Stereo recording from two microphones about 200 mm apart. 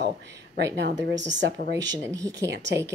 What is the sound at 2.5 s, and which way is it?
Speech, 60° right (ahead or behind).